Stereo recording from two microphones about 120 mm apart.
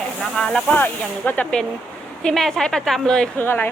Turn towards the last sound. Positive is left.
turn(degrees=15)  # may be behind; listen again after turning